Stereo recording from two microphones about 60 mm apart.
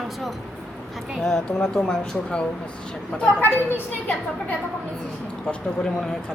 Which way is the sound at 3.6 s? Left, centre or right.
Left.